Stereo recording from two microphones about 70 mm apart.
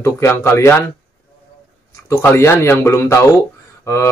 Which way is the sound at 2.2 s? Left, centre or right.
Left.